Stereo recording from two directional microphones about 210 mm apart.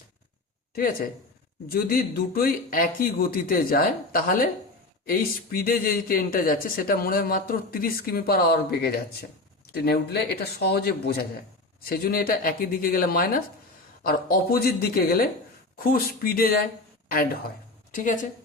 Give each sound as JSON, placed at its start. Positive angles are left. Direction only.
{"t": 1.6, "sound": "speech", "side_deg": 45}
{"t": 17.9, "sound": "speech", "side_deg": 40}